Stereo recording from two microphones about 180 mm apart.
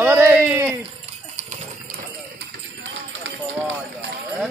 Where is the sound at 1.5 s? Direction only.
55° right (ahead or behind).